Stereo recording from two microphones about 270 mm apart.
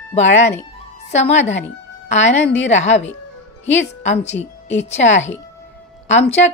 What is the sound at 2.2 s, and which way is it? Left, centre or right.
A woman's voice, left.